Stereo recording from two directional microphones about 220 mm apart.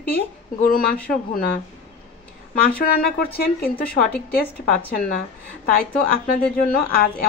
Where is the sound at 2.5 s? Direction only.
45° left (ahead or behind).